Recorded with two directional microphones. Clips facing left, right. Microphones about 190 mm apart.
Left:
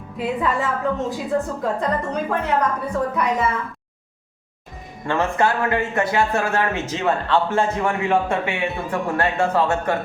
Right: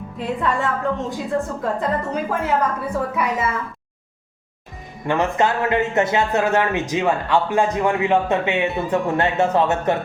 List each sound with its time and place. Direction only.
0.2 s a woman's voice: 5° left (ahead or behind)
5.0 s speech: 15° right (ahead or behind)